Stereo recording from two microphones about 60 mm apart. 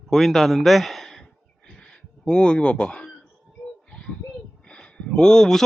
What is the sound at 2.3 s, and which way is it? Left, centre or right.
Speech, centre.